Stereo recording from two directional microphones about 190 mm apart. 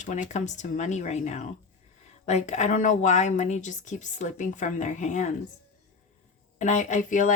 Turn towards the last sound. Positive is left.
turn(degrees=40)  # may be behind; listen again after turning